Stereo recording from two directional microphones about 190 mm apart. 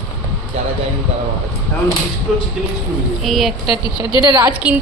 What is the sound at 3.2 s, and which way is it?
Speech, centre (ahead or behind).